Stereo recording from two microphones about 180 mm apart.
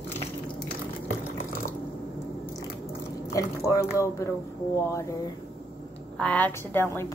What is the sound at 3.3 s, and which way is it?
Speech, 15° left (ahead or behind).